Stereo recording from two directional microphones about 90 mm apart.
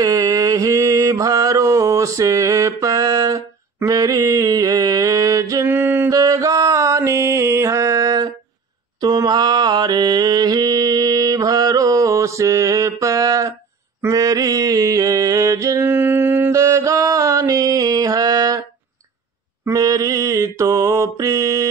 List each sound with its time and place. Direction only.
0.0 s mantra: 40° right (ahead or behind)
5.7 s music: 25° right (ahead or behind)
6.0 s mantra: 40° right (ahead or behind)
9.0 s mantra: 50° right (ahead or behind)
15.8 s music: 20° right (ahead or behind)
16.5 s mantra: 35° right (ahead or behind)